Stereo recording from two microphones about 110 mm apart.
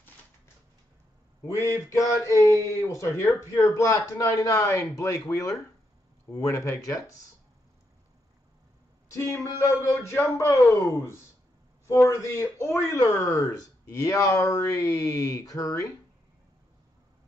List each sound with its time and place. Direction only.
1.6 s a sound: 30° left (ahead or behind)
2.9 s speech: 25° left (ahead or behind)
9.1 s speech: 25° left (ahead or behind)